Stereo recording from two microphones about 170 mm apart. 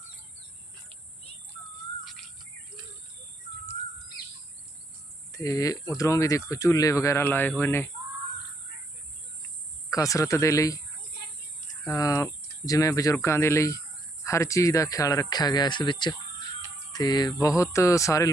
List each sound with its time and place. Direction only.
5.3 s speech: 20° left (ahead or behind)
9.9 s speech: 20° left (ahead or behind)
11.9 s speech: 20° left (ahead or behind)